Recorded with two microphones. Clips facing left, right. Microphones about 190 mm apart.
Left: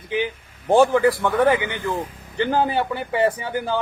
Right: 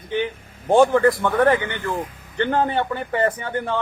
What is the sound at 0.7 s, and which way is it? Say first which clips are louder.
A man's voice: right 1 dB; centre (ahead or behind).